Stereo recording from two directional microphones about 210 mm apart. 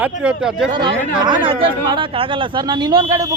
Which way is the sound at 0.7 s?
25° right (ahead or behind).